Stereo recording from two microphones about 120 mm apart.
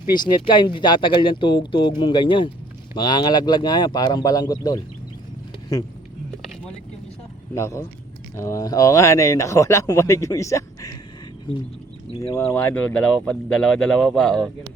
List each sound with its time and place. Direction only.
0.1 s speech: 40° left (ahead or behind)
7.5 s speech: 25° left (ahead or behind)
11.5 s speech: 45° left (ahead or behind)
12.5 s speech: 15° left (ahead or behind)